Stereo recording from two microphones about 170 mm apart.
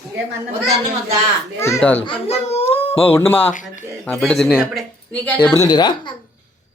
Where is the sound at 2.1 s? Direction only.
35° left (ahead or behind).